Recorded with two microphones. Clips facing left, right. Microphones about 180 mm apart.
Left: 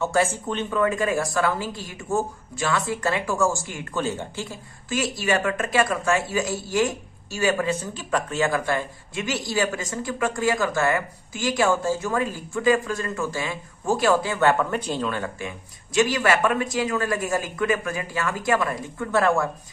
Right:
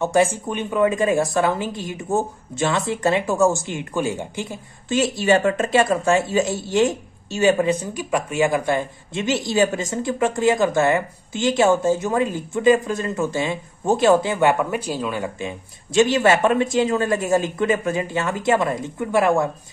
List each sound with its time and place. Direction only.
0.0 s speech: 15° right (ahead or behind)